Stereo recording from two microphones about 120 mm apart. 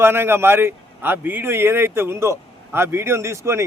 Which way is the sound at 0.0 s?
20° right (ahead or behind).